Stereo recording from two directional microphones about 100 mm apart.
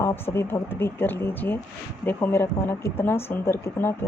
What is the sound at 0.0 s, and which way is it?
Speech, 25° left (ahead or behind).